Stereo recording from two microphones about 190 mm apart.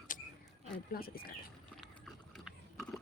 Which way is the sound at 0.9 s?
50° left (ahead or behind).